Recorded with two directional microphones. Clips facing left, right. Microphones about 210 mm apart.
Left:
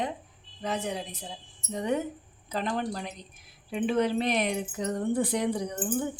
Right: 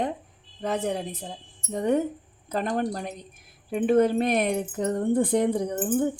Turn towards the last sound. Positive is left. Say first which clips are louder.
# right 5 dB
turn(degrees=-50)  # may be behind; listen again after turning